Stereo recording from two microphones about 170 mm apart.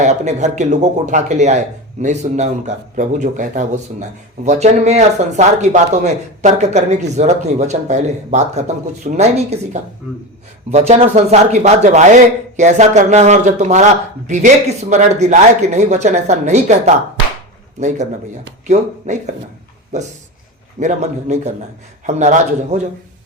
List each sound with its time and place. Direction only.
0.0 s a man's voice: 45° right (ahead or behind)